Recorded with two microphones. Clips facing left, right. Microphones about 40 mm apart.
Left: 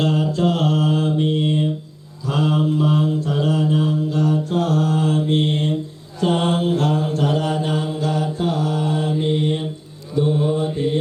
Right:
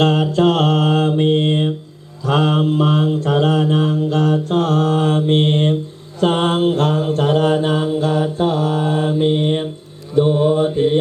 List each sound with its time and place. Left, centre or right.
0.0 s mantra: right